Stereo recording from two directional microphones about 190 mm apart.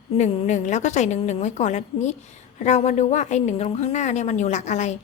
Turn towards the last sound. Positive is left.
turn(degrees=40)  # may be behind; listen again after turning